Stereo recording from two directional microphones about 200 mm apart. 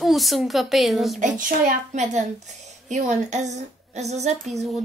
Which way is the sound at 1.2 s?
40° right (ahead or behind).